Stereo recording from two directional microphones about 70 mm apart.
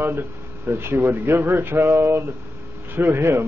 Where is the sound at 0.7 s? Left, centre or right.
Right.